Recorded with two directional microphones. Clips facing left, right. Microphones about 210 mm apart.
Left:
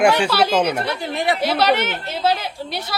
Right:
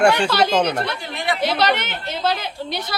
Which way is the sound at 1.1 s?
35° left (ahead or behind).